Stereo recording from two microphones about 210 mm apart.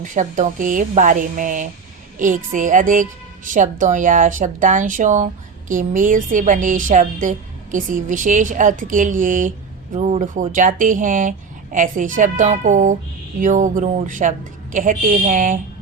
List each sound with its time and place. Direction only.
0.0 s a woman's voice: 35° right (ahead or behind)